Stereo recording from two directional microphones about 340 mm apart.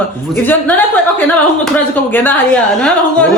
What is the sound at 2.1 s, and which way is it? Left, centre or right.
Speech, centre.